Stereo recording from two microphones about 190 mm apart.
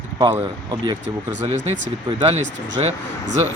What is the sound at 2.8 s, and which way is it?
Speech, 25° right (ahead or behind).